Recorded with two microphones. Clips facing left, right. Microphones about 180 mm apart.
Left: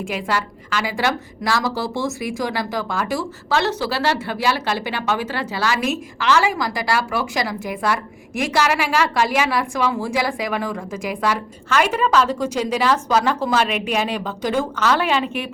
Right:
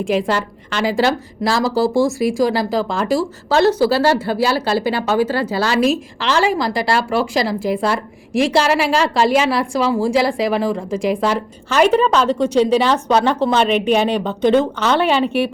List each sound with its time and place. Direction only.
0.0 s a woman's voice: 35° right (ahead or behind)
1.9 s speech: 10° right (ahead or behind)
2.4 s a woman's voice: 35° right (ahead or behind)